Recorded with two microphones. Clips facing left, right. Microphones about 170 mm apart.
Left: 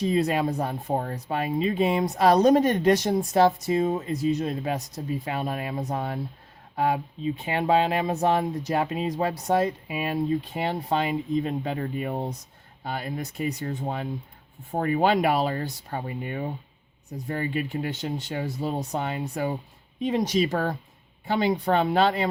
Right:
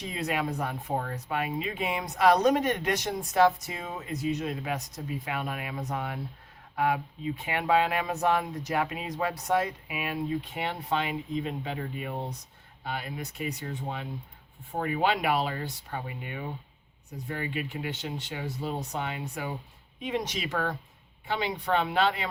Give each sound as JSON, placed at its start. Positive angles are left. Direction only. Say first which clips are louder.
{"t": 0.0, "sound": "speech", "louder": "left 8 dB", "side_deg": 35}